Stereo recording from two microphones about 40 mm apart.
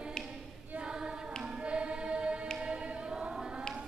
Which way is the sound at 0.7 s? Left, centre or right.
Right.